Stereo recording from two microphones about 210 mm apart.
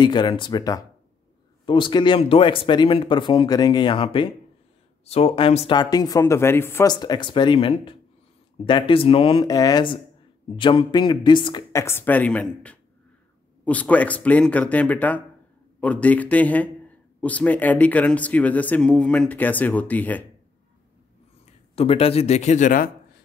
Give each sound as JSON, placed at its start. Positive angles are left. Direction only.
{"t": 0.0, "sound": "a man's voice", "side_deg": 20}
{"t": 21.7, "sound": "speech", "side_deg": 30}